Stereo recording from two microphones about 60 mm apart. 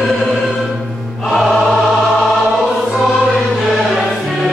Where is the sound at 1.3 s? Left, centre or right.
Centre.